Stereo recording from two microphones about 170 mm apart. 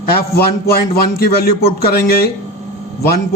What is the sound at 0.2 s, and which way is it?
A man's voice, 65° left (ahead or behind).